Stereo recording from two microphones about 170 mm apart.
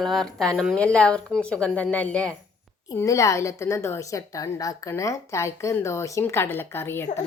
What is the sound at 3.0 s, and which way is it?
Speech, 20° left (ahead or behind).